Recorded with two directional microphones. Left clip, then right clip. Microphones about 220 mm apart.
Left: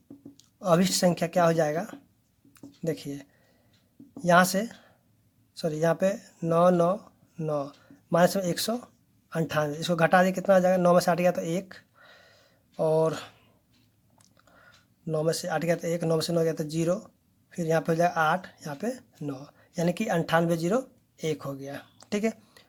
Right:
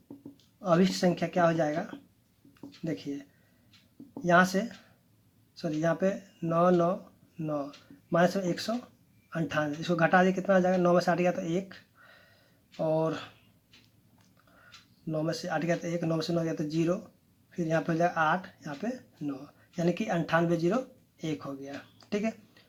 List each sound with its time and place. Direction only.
0.6 s speech: 40° left (ahead or behind)
2.6 s a sound: 40° left (ahead or behind)
4.3 s speech: 40° left (ahead or behind)
15.0 s speech: 40° left (ahead or behind)